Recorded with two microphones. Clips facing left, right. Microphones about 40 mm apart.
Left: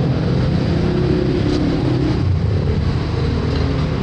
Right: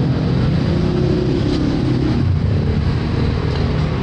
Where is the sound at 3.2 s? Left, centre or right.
Centre.